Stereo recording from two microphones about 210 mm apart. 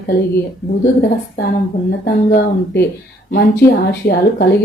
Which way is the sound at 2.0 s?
40° left (ahead or behind).